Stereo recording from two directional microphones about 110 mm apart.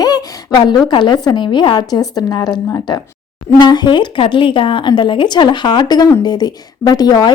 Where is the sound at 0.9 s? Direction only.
45° left (ahead or behind).